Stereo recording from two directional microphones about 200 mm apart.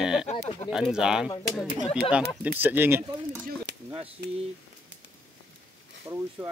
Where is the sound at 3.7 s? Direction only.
60° right (ahead or behind).